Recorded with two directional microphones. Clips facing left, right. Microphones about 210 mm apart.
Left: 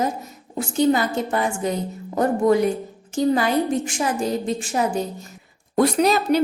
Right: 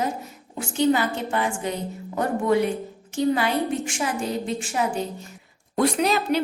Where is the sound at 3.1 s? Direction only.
40° left (ahead or behind).